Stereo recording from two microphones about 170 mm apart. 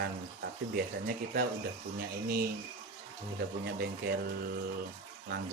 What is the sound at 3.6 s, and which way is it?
Speech, 65° right (ahead or behind).